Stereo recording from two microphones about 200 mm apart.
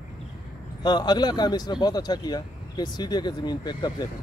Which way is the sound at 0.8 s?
20° left (ahead or behind).